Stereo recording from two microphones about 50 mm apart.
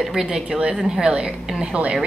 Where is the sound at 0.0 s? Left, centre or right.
Centre.